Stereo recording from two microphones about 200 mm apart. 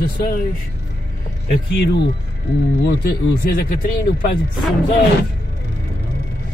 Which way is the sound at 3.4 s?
50° left (ahead or behind).